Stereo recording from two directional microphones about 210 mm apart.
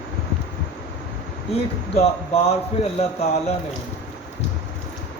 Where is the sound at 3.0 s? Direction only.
30° left (ahead or behind).